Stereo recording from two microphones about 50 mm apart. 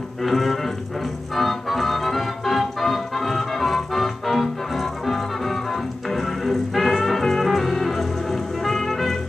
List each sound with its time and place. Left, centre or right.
0.2 s music: centre
1.3 s organ: centre